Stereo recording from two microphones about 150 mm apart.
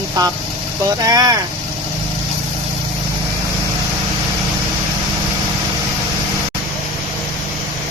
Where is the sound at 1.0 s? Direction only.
25° right (ahead or behind).